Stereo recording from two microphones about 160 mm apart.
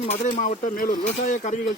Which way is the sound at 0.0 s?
40° left (ahead or behind).